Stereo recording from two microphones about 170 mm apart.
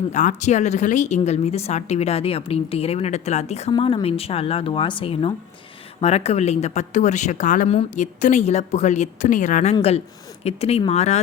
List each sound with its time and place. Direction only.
0.1 s a woman's voice: 45° left (ahead or behind)